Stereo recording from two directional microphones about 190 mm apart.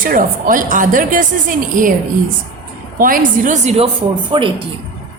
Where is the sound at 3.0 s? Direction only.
45° right (ahead or behind).